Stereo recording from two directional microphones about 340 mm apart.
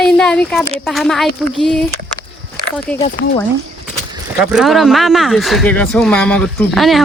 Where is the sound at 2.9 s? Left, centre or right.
Centre.